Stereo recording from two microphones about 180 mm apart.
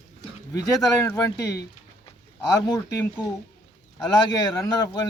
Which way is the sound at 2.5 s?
20° left (ahead or behind).